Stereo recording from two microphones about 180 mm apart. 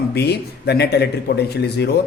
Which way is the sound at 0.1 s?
65° left (ahead or behind).